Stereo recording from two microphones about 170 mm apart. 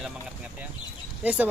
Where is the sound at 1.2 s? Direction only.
10° right (ahead or behind).